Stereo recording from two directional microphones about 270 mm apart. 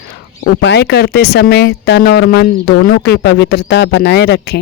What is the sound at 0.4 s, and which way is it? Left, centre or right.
Speech, left.